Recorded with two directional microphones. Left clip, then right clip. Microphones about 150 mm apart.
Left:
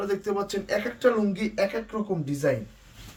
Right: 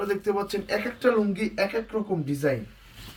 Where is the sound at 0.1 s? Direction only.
20° left (ahead or behind).